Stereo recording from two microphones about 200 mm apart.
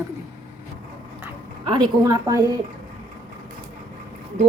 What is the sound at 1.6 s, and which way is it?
Speech, 25° right (ahead or behind).